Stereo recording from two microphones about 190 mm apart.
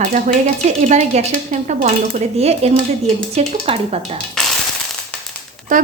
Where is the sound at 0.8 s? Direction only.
35° right (ahead or behind).